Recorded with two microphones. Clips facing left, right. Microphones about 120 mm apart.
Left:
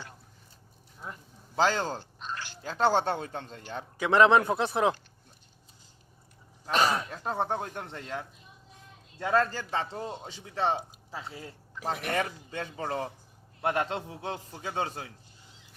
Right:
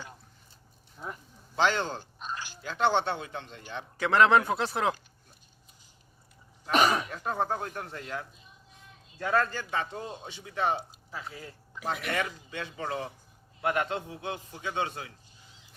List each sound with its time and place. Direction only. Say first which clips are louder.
1.5 s speech: left 1 dB; 35° left (ahead or behind)
2.0 s a sound: even; 15° right (ahead or behind)
2.6 s speech: left 1 dB; 40° left (ahead or behind)
3.9 s a man's voice: left 1 dB; 15° left (ahead or behind)
6.7 s a sound: right 2 dB; 15° right (ahead or behind)
7.2 s a man's voice: even; 25° left (ahead or behind)
10.2 s speech: even; 35° left (ahead or behind)